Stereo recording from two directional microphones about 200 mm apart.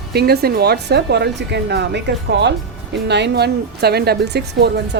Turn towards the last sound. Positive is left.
turn(degrees=-55)  # may be behind; listen again after turning